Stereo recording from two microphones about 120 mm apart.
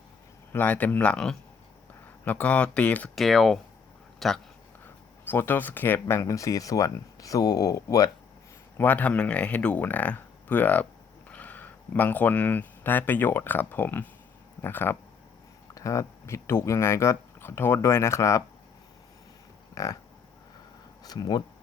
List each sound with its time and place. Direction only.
0.5 s speech: 15° left (ahead or behind)
3.2 s speech: centre (ahead or behind)
5.2 s speech: 15° left (ahead or behind)
8.8 s speech: 15° left (ahead or behind)
19.7 s livestock: 25° left (ahead or behind)
21.0 s speech: 35° left (ahead or behind)